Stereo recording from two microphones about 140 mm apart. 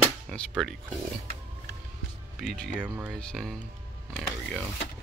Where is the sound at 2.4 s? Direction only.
5° left (ahead or behind).